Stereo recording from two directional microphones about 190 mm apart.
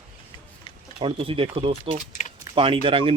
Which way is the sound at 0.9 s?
30° right (ahead or behind).